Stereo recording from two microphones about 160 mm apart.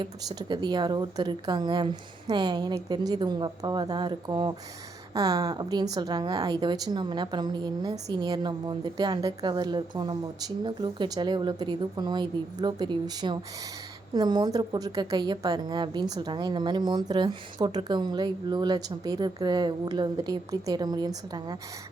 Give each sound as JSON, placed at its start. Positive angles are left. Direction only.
{"t": 0.0, "sound": "a woman's voice", "side_deg": -25}